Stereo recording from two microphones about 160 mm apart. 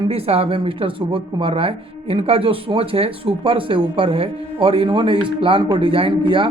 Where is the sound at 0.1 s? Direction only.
35° right (ahead or behind).